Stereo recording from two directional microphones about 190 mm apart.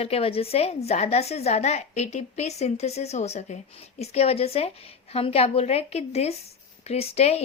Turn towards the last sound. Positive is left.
turn(degrees=35)  # may be behind; listen again after turning